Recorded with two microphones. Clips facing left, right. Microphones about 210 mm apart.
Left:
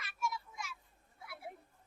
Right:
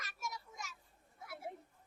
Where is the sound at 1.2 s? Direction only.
40° right (ahead or behind).